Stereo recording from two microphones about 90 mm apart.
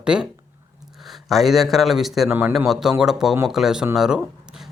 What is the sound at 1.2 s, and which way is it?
Speech, centre (ahead or behind).